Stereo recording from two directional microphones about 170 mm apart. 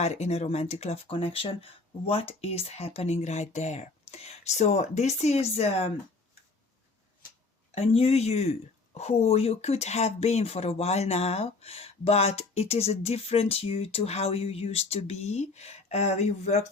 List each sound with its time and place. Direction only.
0.0 s speech: 40° left (ahead or behind)
7.8 s speech: 35° left (ahead or behind)